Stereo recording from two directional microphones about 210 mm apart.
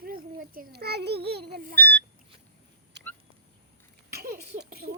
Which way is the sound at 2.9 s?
55° right (ahead or behind).